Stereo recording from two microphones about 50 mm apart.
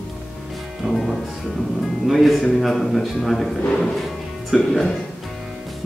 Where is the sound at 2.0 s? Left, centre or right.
Centre.